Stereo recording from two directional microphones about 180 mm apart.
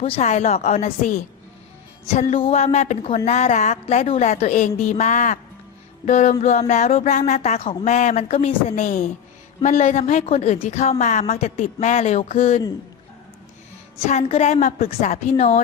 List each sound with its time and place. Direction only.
0.0 s a woman's voice: 35° left (ahead or behind)
14.1 s a woman's voice: 35° left (ahead or behind)